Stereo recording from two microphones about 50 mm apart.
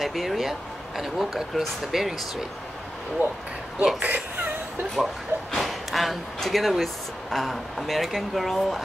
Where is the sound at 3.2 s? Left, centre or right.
Right.